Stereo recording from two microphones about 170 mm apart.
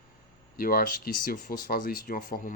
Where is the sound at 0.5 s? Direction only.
60° left (ahead or behind).